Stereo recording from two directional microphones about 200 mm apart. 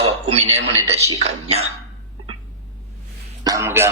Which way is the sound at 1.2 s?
30° right (ahead or behind).